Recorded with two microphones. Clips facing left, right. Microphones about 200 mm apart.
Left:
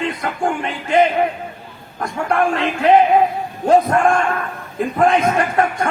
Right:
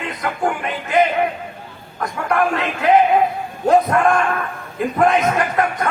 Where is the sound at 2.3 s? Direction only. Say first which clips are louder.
Left 1 dB; 30° left (ahead or behind).